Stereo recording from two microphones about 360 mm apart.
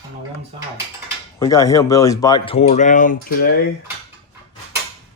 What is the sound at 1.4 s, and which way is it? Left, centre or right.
Speech, centre.